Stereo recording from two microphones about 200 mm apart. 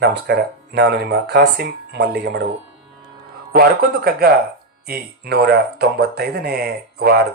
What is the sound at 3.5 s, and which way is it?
Speech, 50° right (ahead or behind).